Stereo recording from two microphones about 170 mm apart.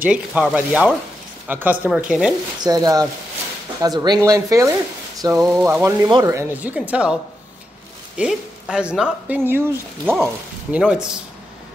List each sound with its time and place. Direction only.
0.0 s speech: 5° right (ahead or behind)
2.6 s speech: 20° right (ahead or behind); by 7.2 s 5° right (ahead or behind)
8.2 s speech: 5° right (ahead or behind)